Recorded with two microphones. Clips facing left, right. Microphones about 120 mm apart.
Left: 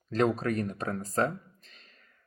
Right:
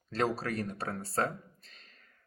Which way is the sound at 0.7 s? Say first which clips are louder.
Left 3 dB; 35° right (ahead or behind).